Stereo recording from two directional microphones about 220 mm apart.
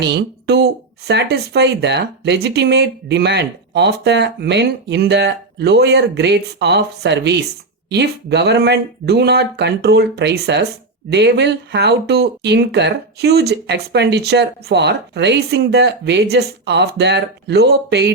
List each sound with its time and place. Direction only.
0.0 s speech: 50° right (ahead or behind)